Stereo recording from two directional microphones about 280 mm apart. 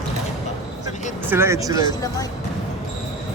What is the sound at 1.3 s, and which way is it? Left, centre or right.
Speech, centre.